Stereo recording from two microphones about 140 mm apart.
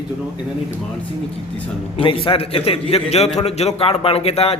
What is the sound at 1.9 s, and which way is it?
A man's voice, 40° left (ahead or behind).